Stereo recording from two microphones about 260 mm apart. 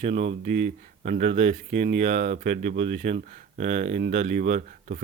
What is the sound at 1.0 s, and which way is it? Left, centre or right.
Speech, right.